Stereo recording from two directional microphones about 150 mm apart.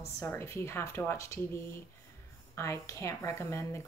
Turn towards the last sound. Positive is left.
turn(degrees=20)  # may be behind; listen again after turning